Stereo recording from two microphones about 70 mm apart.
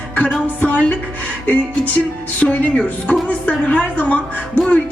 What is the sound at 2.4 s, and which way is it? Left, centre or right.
Speech, left.